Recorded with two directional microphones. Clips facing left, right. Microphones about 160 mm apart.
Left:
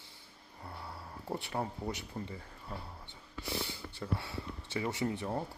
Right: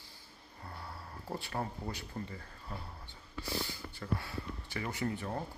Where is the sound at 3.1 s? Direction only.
25° left (ahead or behind).